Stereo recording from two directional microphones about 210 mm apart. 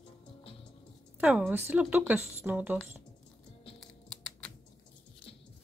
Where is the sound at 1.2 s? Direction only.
5° right (ahead or behind).